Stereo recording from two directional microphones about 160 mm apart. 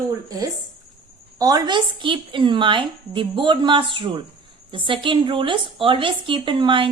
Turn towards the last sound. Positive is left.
turn(degrees=-30)  # may be behind; listen again after turning